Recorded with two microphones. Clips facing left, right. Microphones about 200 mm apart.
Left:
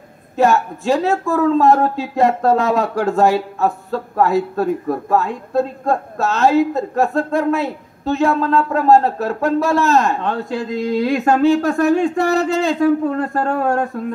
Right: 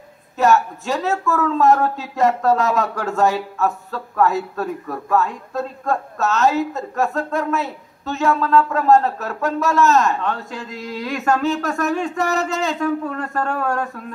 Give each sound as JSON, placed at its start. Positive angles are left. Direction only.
{"t": 0.4, "sound": "speech", "side_deg": 35}